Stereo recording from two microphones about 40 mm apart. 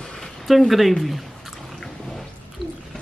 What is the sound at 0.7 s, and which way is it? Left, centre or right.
Speech, centre.